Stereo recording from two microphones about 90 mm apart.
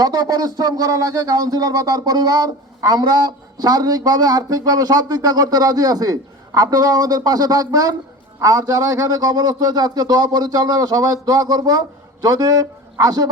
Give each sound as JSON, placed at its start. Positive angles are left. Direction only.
{"t": 0.0, "sound": "speech", "side_deg": -50}